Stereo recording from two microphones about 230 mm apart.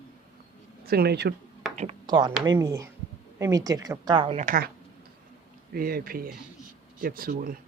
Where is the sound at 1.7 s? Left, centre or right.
Right.